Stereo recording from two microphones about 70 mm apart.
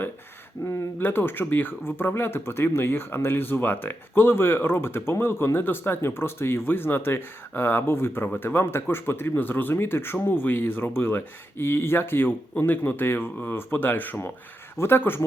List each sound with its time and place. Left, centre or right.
0.6 s speech: left
0.9 s speech: left